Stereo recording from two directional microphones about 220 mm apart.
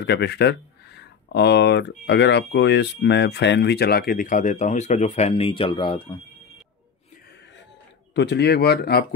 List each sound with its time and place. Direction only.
0.0 s speech: 50° left (ahead or behind); by 6.2 s 20° left (ahead or behind)
8.1 s speech: 50° left (ahead or behind)